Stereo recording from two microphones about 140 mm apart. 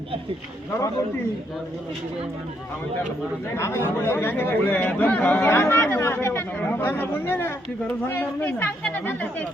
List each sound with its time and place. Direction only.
3.5 s speech: 20° left (ahead or behind)